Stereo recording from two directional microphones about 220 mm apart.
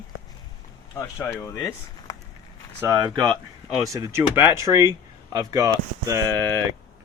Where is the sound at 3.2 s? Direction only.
5° left (ahead or behind).